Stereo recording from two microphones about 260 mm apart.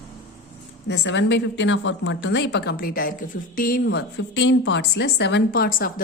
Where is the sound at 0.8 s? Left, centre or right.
Left.